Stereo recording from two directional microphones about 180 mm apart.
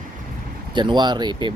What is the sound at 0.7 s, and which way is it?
Speech, 25° right (ahead or behind).